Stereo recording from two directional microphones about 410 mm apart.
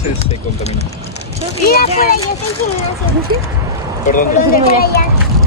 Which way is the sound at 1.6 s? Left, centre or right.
Centre.